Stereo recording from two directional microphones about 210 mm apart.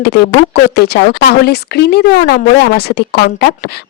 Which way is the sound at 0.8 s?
50° left (ahead or behind).